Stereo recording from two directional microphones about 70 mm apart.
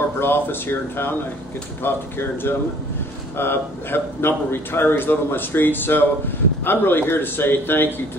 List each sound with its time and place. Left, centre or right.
0.2 s speech: left